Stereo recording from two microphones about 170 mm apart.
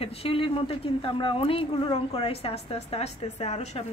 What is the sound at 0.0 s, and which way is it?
Speech, 35° left (ahead or behind).